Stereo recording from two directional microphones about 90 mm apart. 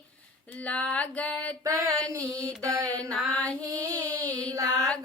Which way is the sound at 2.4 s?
35° right (ahead or behind).